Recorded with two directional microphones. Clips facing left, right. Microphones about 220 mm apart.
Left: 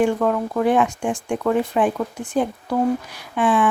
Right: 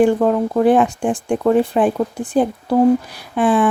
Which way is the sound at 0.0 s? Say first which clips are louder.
Right 5 dB; 30° right (ahead or behind).